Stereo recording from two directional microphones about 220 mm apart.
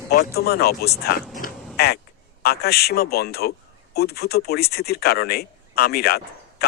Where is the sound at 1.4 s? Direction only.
45° left (ahead or behind).